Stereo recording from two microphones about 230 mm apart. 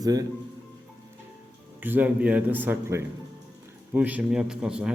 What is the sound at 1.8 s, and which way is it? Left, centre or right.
A man's voice, centre.